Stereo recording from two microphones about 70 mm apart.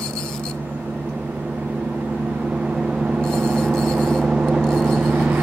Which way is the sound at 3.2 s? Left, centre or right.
Centre.